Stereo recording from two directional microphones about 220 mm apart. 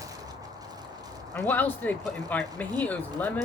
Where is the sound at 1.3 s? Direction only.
10° left (ahead or behind).